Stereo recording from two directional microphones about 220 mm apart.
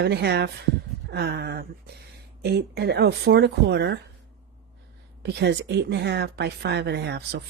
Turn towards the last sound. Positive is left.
turn(degrees=-50)  # may be behind; listen again after turning